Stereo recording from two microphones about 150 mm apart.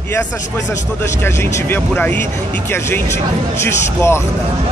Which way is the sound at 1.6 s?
10° left (ahead or behind).